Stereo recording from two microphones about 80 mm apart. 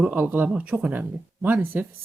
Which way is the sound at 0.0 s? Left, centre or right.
Centre.